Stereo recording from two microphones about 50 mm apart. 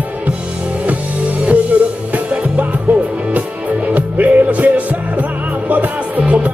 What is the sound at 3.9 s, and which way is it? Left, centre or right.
Music, right.